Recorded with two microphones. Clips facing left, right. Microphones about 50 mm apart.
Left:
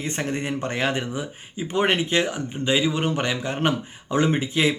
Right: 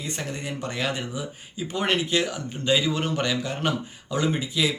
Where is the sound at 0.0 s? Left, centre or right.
Left.